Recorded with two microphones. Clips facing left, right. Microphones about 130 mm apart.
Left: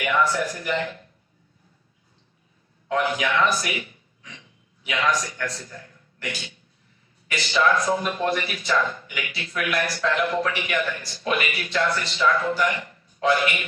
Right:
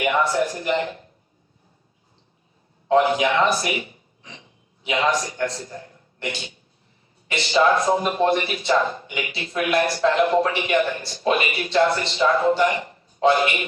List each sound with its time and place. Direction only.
0.0 s a man's voice: 25° right (ahead or behind)
2.9 s a man's voice: 25° right (ahead or behind)